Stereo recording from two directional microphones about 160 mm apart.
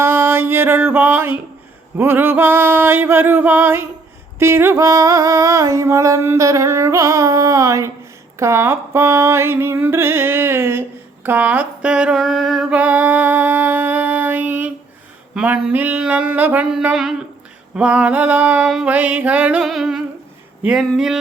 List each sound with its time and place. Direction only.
0.0 s music: 15° right (ahead or behind)
2.0 s a sound: 15° right (ahead or behind)
20.6 s speech: 5° right (ahead or behind)